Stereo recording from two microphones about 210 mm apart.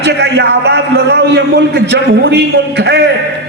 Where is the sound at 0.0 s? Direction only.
55° right (ahead or behind).